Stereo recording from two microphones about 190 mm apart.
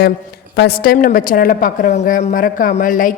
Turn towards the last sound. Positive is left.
turn(degrees=45)  # may be behind; listen again after turning